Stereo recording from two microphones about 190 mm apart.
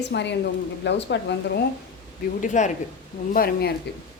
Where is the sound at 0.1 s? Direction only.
65° left (ahead or behind).